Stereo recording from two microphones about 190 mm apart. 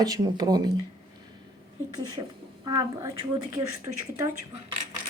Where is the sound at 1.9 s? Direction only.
20° right (ahead or behind).